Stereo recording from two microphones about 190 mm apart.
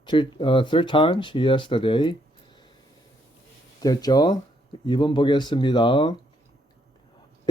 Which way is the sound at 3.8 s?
20° left (ahead or behind).